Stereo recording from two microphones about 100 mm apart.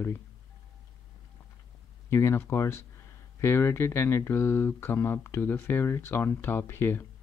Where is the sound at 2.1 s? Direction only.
25° left (ahead or behind).